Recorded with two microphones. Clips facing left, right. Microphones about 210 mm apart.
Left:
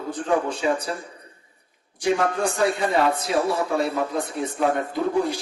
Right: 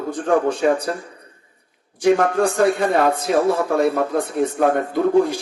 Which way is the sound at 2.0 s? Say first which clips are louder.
Right 6 dB; 55° right (ahead or behind).